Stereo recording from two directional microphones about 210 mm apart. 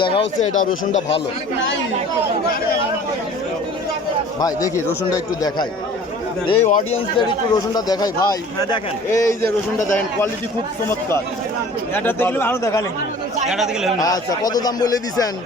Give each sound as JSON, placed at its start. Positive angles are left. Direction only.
{"t": 0.2, "sound": "speech", "side_deg": 70}
{"t": 4.4, "sound": "a man's voice", "side_deg": 15}
{"t": 6.5, "sound": "speech", "side_deg": 35}
{"t": 7.2, "sound": "a man's voice", "side_deg": 20}
{"t": 11.9, "sound": "a man's voice", "side_deg": 10}
{"t": 13.5, "sound": "a man's voice", "side_deg": 0}
{"t": 14.0, "sound": "a man's voice", "side_deg": 15}